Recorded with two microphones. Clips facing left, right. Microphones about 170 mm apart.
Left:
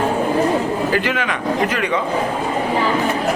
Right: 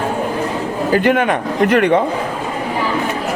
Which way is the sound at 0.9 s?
50° right (ahead or behind).